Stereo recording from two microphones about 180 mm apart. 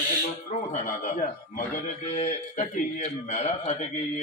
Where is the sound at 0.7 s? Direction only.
45° left (ahead or behind).